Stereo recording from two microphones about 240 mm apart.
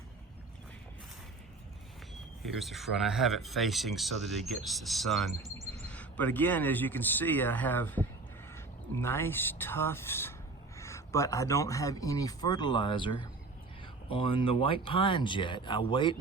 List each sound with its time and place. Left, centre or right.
2.4 s speech: centre